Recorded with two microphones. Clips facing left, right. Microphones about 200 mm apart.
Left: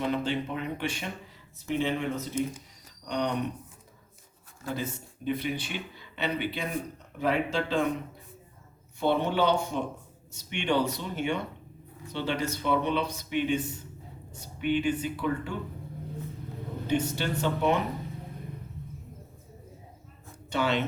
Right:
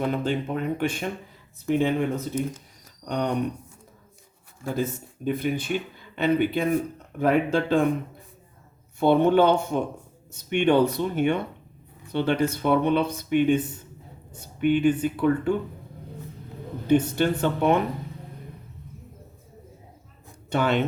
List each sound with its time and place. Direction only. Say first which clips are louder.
0.1 s speech: right 3 dB; 50° right (ahead or behind)
4.6 s speech: right 6 dB; 45° right (ahead or behind)
9.0 s speech: right 7 dB; 50° right (ahead or behind)
16.8 s speech: right 8 dB; 55° right (ahead or behind)
20.5 s speech: right 4 dB; 55° right (ahead or behind)